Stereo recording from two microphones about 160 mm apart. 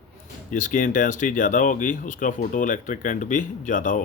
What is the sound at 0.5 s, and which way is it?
Speech, 55° left (ahead or behind).